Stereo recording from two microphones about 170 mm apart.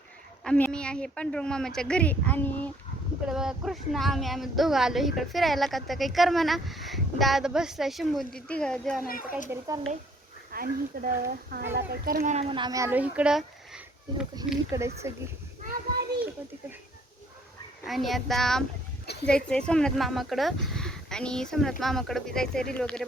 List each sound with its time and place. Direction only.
0.4 s a woman's voice: 5° left (ahead or behind)
3.2 s a woman's voice: 5° right (ahead or behind)
10.5 s speech: 60° right (ahead or behind)
12.2 s speech: 40° right (ahead or behind); by 14.3 s 5° right (ahead or behind)
14.7 s speech: 20° right (ahead or behind)
15.6 s children playing: 65° right (ahead or behind)
17.8 s a woman's voice: centre (ahead or behind)